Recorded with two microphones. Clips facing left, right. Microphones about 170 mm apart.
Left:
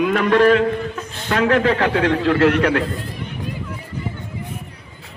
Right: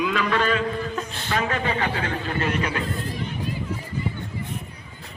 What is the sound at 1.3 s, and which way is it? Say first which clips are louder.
A man's voice: left 9 dB; 75° left (ahead or behind).